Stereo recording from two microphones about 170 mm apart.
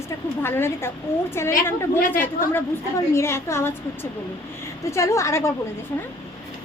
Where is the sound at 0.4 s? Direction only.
15° left (ahead or behind).